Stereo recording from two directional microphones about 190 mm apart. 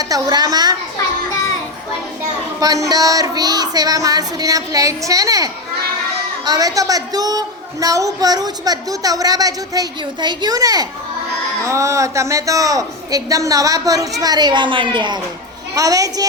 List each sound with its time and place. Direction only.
0.0 s a woman's voice: 20° right (ahead or behind)
2.6 s a woman's voice: 20° right (ahead or behind)